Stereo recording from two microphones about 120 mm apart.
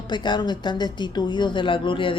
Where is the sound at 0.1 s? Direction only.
40° left (ahead or behind).